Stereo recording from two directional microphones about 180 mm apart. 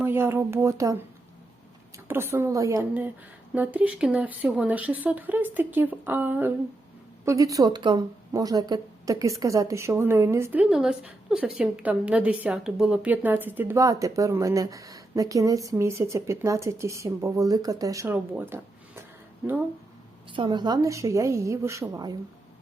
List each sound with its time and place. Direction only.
0.0 s a woman's voice: 10° right (ahead or behind)
2.0 s a woman's voice: 15° right (ahead or behind)
20.3 s a woman's voice: 25° right (ahead or behind)